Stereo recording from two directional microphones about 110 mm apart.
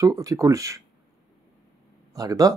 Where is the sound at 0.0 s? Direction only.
30° right (ahead or behind).